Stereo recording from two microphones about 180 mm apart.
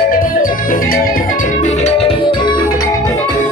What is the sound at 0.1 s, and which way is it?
Music, 50° left (ahead or behind).